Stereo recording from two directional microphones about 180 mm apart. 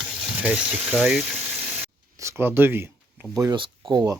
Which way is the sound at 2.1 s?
15° right (ahead or behind).